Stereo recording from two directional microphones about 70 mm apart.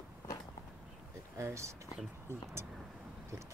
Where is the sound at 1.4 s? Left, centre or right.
Right.